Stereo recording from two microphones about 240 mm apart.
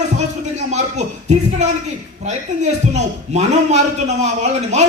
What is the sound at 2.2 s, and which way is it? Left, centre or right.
Speech, right.